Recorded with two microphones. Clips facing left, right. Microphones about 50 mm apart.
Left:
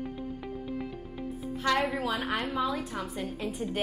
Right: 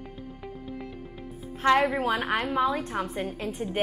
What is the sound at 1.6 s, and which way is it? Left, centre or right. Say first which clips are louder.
A woman's voice: right 6 dB; right.